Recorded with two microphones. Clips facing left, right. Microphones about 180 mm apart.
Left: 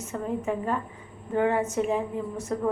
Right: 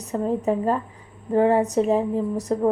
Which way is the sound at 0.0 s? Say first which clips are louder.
Right 6 dB; 35° right (ahead or behind).